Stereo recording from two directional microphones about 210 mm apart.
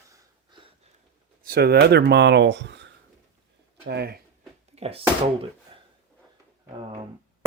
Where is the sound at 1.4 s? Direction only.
50° right (ahead or behind).